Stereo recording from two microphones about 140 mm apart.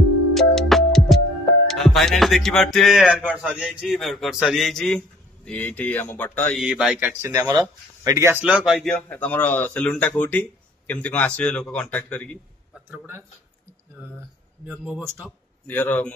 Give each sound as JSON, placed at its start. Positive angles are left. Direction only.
{"t": 0.3, "sound": "music", "side_deg": 5}
{"t": 1.7, "sound": "speech", "side_deg": 0}
{"t": 6.5, "sound": "speech", "side_deg": -5}
{"t": 8.3, "sound": "a man's voice", "side_deg": -10}
{"t": 12.7, "sound": "a man's voice", "side_deg": -15}
{"t": 14.7, "sound": "speech", "side_deg": -10}
{"t": 15.6, "sound": "a man's voice", "side_deg": 10}